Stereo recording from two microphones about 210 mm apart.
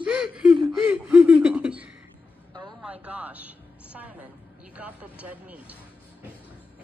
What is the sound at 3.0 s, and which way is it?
Music, 5° right (ahead or behind).